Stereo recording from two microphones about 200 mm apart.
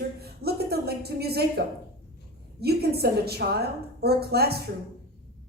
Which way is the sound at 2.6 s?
50° right (ahead or behind).